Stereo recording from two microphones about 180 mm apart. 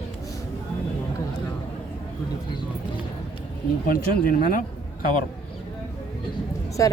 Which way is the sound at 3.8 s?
50° left (ahead or behind).